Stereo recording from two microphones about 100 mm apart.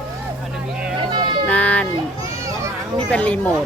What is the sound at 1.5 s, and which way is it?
Speech, 15° left (ahead or behind).